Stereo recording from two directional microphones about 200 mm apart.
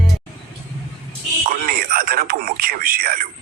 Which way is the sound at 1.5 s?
45° right (ahead or behind).